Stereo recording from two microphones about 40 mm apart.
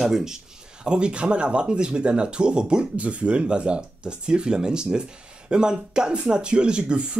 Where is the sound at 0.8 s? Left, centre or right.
Right.